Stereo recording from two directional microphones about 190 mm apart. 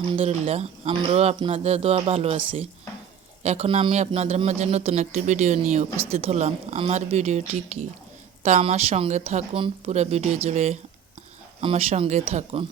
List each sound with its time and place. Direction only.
0.2 s speech: 35° right (ahead or behind)